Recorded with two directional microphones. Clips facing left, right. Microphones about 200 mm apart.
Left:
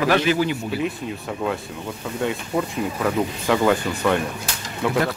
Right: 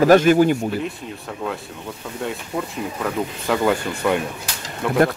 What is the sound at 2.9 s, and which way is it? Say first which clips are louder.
Speech: left 2 dB; centre (ahead or behind).